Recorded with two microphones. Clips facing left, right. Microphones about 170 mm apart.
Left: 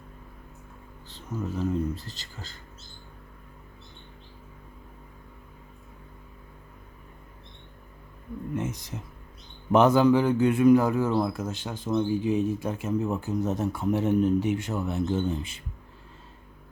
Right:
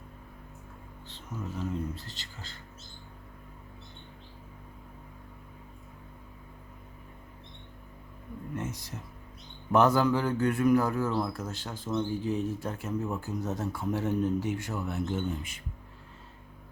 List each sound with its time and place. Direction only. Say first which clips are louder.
1.3 s speech: left 6 dB; 40° left (ahead or behind)
8.5 s speech: left 5 dB; 20° left (ahead or behind)